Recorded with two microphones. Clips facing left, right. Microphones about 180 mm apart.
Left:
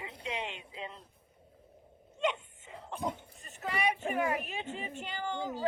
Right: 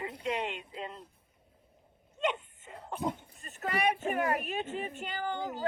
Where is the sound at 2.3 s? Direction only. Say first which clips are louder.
Right 3 dB; 45° right (ahead or behind).